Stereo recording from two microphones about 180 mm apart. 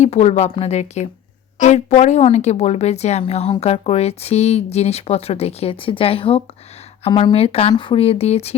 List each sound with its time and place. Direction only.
0.0 s a woman's voice: 40° left (ahead or behind)